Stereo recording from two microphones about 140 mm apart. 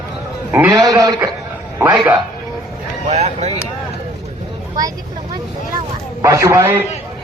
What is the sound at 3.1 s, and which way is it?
Speech, 50° right (ahead or behind).